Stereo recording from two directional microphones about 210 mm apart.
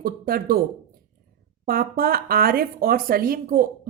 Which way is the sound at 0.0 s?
45° right (ahead or behind).